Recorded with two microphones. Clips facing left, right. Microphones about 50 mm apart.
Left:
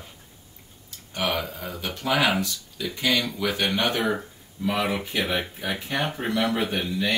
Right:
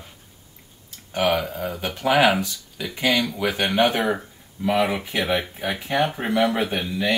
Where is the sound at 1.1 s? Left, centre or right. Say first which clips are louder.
Right 5 dB; right.